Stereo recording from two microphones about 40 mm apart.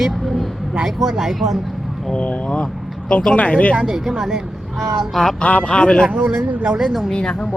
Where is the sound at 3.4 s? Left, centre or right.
Left.